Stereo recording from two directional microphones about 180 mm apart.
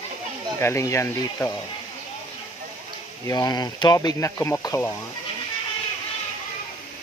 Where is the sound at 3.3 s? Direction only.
20° left (ahead or behind).